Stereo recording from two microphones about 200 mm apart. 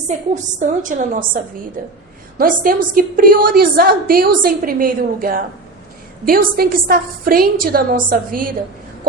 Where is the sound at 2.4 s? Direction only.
45° right (ahead or behind).